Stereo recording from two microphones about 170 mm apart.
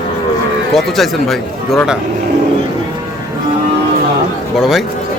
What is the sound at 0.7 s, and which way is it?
Speech, centre (ahead or behind).